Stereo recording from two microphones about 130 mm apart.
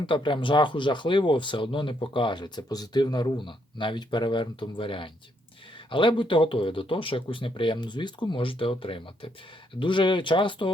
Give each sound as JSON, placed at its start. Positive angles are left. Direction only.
{"t": 0.0, "sound": "speech", "side_deg": 40}